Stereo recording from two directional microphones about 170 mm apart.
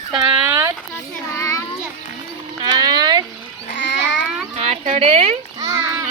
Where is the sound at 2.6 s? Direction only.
25° right (ahead or behind).